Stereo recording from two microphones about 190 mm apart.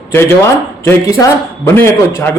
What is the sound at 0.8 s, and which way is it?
A man's voice, 15° left (ahead or behind).